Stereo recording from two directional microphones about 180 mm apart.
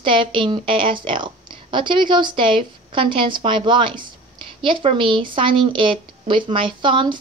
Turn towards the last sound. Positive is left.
turn(degrees=-25)  # may be behind; listen again after turning